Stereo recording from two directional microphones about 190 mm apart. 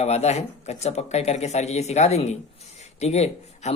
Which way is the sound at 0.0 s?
35° left (ahead or behind).